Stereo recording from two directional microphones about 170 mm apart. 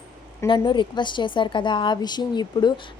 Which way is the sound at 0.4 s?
30° left (ahead or behind).